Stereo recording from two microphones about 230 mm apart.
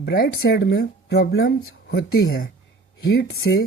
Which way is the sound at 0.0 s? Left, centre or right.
Left.